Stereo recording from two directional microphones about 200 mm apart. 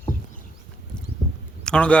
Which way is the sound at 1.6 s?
5° left (ahead or behind).